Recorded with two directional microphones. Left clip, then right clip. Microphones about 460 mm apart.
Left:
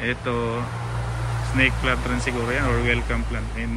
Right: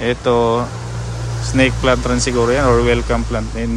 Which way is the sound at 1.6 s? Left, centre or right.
Centre.